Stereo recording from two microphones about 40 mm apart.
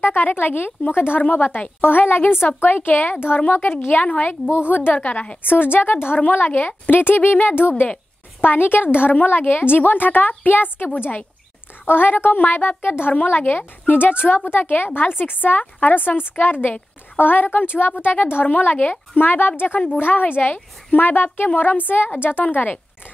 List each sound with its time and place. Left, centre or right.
0.0 s a woman's voice: left
4.9 s a woman's voice: left
5.5 s a woman's voice: left
6.1 s a woman's voice: left
11.8 s a woman's voice: left
22.4 s a woman's voice: left